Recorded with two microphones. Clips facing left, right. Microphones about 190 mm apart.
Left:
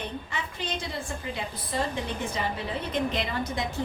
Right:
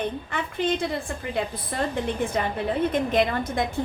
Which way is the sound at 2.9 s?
50° right (ahead or behind).